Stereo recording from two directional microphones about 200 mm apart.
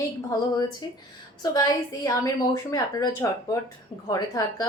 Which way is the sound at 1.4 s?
20° left (ahead or behind).